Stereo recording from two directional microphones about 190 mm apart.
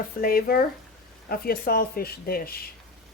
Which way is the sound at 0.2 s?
50° left (ahead or behind).